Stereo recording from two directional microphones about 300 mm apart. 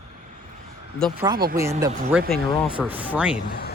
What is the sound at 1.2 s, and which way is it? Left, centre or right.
Speech, centre.